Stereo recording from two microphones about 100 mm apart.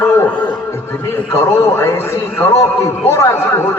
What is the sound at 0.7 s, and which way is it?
A man's voice, 25° left (ahead or behind).